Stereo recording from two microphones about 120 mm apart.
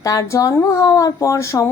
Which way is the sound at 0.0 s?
30° left (ahead or behind).